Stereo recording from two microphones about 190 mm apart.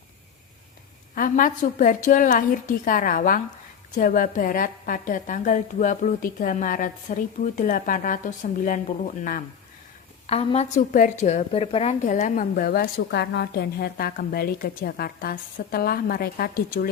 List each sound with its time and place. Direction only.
1.1 s a woman's voice: 45° left (ahead or behind)
10.2 s a woman's voice: 30° left (ahead or behind); by 16.9 s 50° left (ahead or behind)